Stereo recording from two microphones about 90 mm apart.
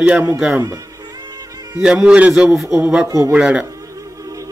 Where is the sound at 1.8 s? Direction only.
10° right (ahead or behind).